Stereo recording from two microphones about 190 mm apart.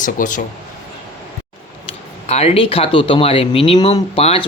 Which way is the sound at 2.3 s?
35° left (ahead or behind).